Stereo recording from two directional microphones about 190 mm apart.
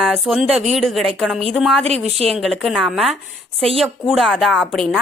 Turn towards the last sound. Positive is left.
turn(degrees=0)  # may be behind; listen again after turning